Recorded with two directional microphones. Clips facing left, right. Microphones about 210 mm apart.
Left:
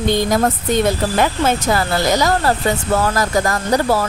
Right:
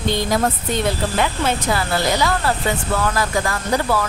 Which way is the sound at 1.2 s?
45° left (ahead or behind).